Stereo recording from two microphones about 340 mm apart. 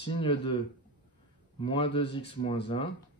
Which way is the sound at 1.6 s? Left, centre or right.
Centre.